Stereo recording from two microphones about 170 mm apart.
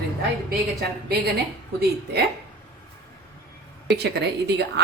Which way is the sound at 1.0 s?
65° right (ahead or behind).